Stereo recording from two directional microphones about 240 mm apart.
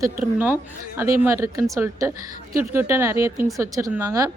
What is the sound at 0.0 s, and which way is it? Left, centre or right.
A woman's voice, centre.